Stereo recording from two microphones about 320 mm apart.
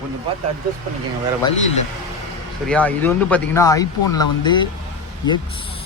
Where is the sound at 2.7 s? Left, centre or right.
Centre.